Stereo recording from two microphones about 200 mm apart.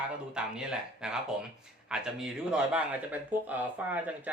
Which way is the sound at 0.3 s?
5° right (ahead or behind).